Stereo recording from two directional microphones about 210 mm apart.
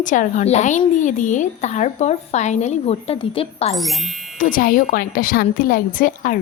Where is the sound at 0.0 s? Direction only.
35° left (ahead or behind).